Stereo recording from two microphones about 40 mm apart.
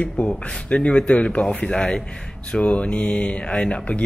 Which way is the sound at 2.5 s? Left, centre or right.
Left.